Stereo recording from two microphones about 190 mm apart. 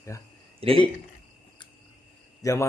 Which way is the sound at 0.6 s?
30° right (ahead or behind).